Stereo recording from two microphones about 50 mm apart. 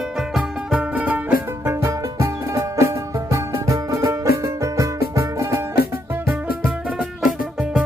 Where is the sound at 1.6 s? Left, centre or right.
Right.